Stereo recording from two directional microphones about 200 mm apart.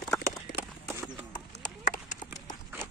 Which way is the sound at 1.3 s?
40° left (ahead or behind).